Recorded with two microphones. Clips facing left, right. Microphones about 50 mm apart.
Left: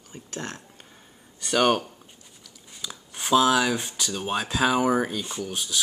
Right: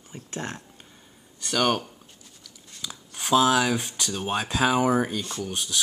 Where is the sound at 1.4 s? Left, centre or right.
Centre.